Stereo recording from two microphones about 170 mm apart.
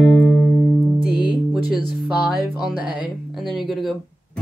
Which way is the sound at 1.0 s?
65° left (ahead or behind).